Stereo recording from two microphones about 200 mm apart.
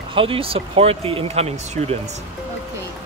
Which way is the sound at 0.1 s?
25° right (ahead or behind).